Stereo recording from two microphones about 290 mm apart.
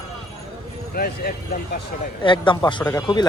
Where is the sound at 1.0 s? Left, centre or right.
Left.